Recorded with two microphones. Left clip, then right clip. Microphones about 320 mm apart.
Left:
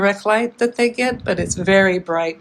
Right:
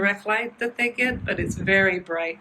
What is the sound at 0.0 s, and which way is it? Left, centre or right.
Speech, centre.